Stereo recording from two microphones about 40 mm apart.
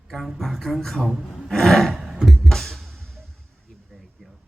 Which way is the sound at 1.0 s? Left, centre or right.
Centre.